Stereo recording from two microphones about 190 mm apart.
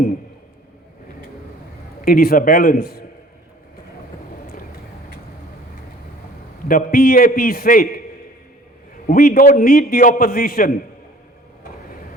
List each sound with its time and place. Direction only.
2.0 s a man's voice: 50° left (ahead or behind)
4.5 s vehicle: 50° left (ahead or behind)
6.7 s a man's voice: 50° left (ahead or behind)
9.0 s a man's voice: 45° left (ahead or behind)